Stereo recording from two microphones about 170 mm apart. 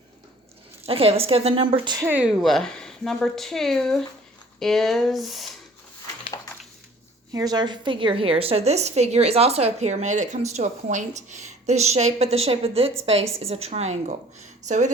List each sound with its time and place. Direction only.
0.9 s a woman's voice: 35° right (ahead or behind)
2.0 s speech: 10° right (ahead or behind)
7.3 s a woman's voice: 25° right (ahead or behind); by 14.2 s 40° right (ahead or behind)